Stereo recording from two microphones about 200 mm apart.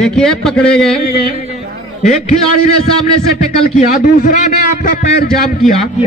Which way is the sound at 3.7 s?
40° left (ahead or behind).